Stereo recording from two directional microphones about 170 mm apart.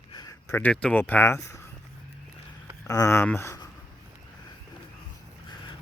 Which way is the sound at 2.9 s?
15° left (ahead or behind).